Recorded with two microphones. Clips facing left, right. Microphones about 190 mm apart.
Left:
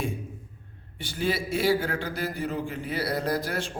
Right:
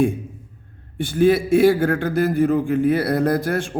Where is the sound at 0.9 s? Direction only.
50° right (ahead or behind).